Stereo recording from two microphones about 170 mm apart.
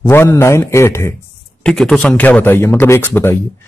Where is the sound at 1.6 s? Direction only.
5° left (ahead or behind).